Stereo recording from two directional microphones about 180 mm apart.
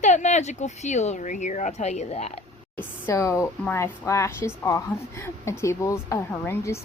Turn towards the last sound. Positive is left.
turn(degrees=15)  # may be behind; listen again after turning